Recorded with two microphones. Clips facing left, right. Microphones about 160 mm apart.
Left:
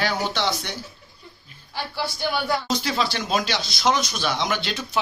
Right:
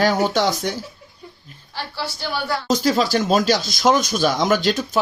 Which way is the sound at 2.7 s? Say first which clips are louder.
Right 7 dB; 40° right (ahead or behind).